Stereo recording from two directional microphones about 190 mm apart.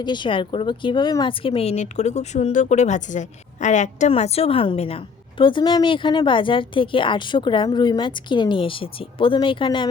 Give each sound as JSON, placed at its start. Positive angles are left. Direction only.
{"t": 0.0, "sound": "speech", "side_deg": 25}